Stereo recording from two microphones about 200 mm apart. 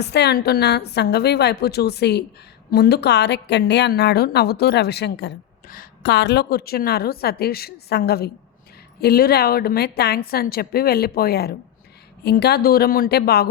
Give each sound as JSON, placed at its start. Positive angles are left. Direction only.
{"t": 0.0, "sound": "a woman's voice", "side_deg": 55}
{"t": 5.6, "sound": "a woman's voice", "side_deg": 45}